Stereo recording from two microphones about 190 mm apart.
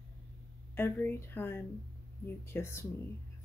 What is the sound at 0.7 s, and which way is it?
Speech, 10° left (ahead or behind).